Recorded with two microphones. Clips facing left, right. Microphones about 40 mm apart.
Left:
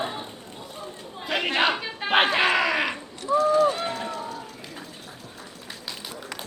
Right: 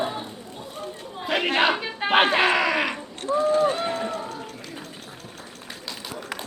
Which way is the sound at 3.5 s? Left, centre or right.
Right.